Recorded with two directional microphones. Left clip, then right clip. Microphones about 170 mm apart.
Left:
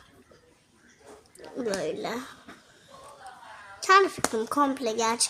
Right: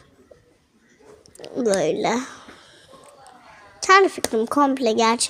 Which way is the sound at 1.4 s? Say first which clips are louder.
Right 9 dB; 30° right (ahead or behind).